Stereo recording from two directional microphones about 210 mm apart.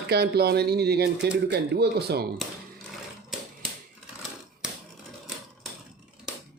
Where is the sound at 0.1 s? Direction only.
50° right (ahead or behind).